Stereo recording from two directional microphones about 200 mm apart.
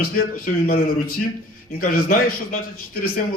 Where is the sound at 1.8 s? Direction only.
45° left (ahead or behind).